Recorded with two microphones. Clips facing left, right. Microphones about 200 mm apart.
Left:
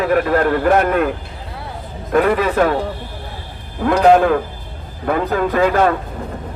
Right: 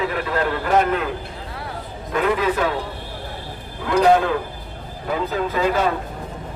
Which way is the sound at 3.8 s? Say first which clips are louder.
Left 4 dB; 55° left (ahead or behind).